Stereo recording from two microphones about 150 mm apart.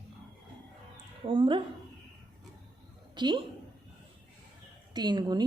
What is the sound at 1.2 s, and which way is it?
Speech, 35° right (ahead or behind).